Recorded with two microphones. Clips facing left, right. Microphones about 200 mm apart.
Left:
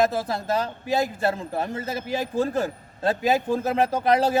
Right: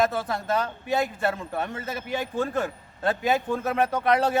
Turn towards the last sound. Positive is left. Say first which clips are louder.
# left 2 dB
turn(degrees=30)  # may be behind; listen again after turning